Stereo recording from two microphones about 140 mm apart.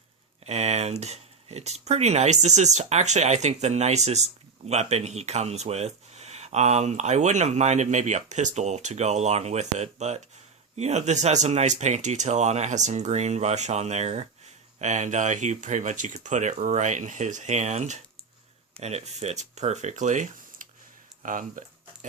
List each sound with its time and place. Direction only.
0.4 s speech: 50° right (ahead or behind)
21.2 s speech: 75° right (ahead or behind)